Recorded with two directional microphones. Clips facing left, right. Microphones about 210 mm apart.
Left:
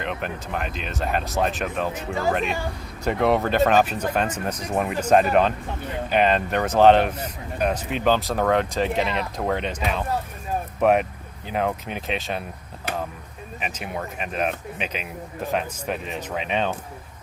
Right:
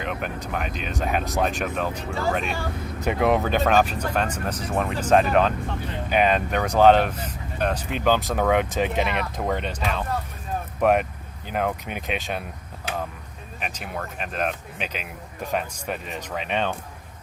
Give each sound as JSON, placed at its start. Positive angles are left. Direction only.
{"t": 0.0, "sound": "speech", "side_deg": -5}
{"t": 13.6, "sound": "speech", "side_deg": 0}